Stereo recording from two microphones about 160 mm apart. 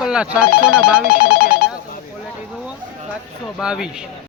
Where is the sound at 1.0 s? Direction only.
75° left (ahead or behind).